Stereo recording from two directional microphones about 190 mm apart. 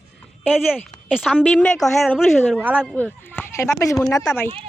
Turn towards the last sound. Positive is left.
turn(degrees=15)  # may be behind; listen again after turning